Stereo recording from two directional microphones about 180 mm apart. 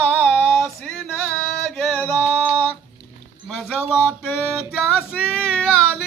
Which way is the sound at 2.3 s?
10° left (ahead or behind).